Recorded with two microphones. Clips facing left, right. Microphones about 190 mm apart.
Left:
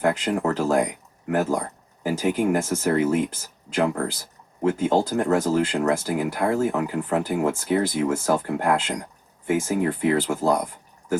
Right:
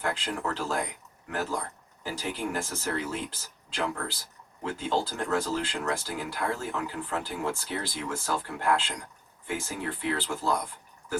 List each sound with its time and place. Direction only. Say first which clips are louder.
0.0 s speech: left 9 dB; 45° left (ahead or behind)